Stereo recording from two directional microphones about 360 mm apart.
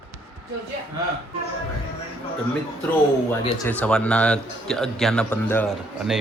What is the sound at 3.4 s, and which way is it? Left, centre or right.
A man's voice, centre.